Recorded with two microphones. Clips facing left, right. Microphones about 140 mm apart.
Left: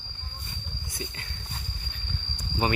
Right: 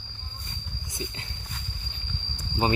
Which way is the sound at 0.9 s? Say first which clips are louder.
Right 2 dB; 25° right (ahead or behind).